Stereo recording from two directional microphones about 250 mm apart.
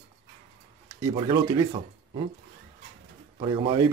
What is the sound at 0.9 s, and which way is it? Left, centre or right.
Speech, centre.